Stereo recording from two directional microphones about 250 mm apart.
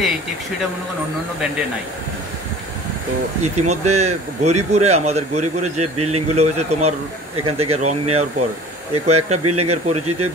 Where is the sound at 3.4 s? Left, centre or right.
Right.